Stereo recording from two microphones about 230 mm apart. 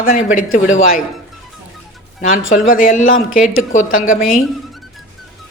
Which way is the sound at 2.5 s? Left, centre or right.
Left.